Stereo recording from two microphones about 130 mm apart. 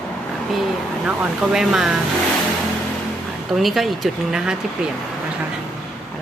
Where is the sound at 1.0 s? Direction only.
5° right (ahead or behind).